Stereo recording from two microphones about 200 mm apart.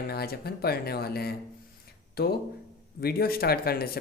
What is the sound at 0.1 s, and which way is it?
Speech, 50° left (ahead or behind).